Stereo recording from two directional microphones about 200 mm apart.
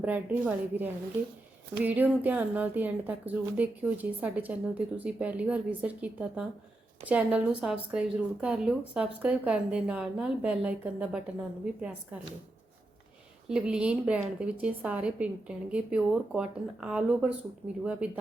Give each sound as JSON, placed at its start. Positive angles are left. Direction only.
{"t": 0.0, "sound": "a woman's voice", "side_deg": -5}
{"t": 13.5, "sound": "a woman's voice", "side_deg": -5}